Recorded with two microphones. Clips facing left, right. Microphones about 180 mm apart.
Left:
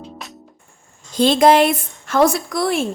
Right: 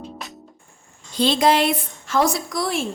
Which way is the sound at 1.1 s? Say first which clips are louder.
Left 5 dB; 50° left (ahead or behind).